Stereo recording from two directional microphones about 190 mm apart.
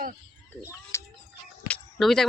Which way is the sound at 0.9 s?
15° left (ahead or behind).